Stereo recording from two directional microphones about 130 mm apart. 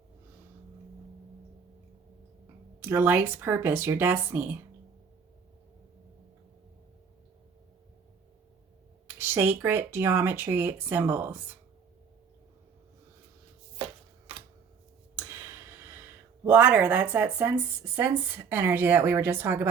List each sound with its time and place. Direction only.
2.8 s speech: 15° right (ahead or behind)
9.0 s speech: 15° right (ahead or behind)
16.5 s speech: 10° right (ahead or behind)